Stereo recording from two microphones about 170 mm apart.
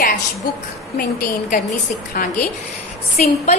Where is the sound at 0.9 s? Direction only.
55° left (ahead or behind).